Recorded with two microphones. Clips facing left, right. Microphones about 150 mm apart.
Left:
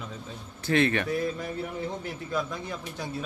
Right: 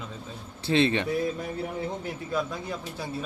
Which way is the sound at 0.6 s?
20° right (ahead or behind).